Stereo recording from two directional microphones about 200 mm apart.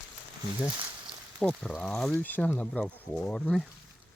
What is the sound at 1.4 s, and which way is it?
Speech, 5° left (ahead or behind).